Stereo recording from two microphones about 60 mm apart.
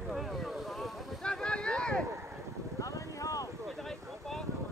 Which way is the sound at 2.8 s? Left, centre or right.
Left.